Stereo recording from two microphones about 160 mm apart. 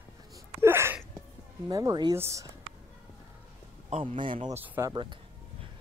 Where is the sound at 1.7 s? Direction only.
20° right (ahead or behind).